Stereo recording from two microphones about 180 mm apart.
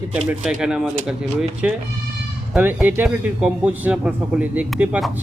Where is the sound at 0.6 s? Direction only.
5° right (ahead or behind).